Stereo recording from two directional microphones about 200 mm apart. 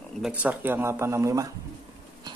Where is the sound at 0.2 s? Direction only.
10° right (ahead or behind).